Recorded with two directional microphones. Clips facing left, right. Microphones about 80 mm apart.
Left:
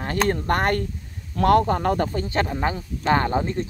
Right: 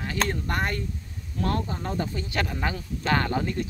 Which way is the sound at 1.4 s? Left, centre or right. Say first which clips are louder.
Left 11 dB; left.